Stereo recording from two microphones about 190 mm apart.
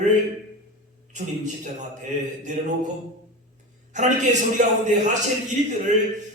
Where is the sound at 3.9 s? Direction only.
40° right (ahead or behind).